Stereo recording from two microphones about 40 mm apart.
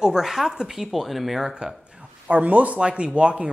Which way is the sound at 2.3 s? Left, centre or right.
Right.